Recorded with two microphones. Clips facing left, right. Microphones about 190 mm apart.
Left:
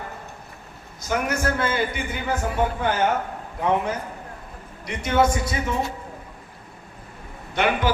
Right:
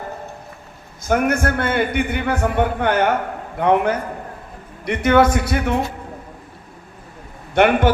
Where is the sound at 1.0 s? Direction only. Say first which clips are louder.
Right 6 dB; 55° right (ahead or behind).